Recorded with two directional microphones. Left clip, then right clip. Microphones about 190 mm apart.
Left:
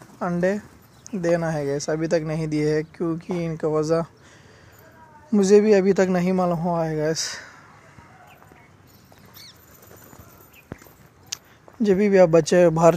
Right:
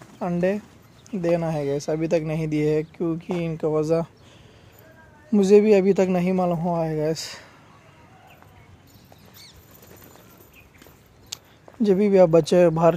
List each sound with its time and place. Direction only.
0.2 s speech: 5° right (ahead or behind)
1.0 s a sound: 20° right (ahead or behind)
1.3 s a man's voice: 5° right (ahead or behind)
5.3 s a man's voice: 10° right (ahead or behind)
11.3 s a sound: 15° right (ahead or behind)
11.8 s a man's voice: 10° right (ahead or behind)